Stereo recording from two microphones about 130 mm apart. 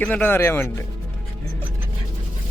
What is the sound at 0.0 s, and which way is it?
Speech, 15° left (ahead or behind).